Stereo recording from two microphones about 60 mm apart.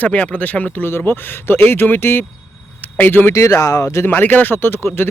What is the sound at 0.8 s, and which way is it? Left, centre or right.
Speech, left.